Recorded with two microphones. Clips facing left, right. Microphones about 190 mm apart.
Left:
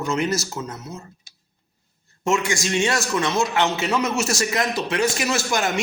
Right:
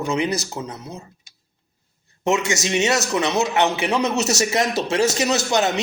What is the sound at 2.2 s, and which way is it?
A man's voice, 20° right (ahead or behind).